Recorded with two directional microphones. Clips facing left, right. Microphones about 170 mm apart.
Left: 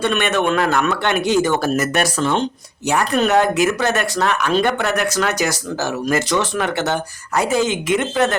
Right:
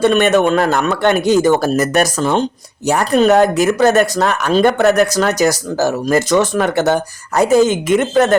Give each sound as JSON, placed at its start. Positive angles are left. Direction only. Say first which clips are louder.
{"t": 0.0, "sound": "speech", "louder": "right 7 dB", "side_deg": -40}